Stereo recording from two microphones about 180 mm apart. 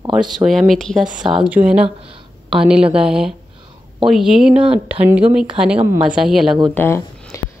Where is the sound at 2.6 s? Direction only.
5° right (ahead or behind).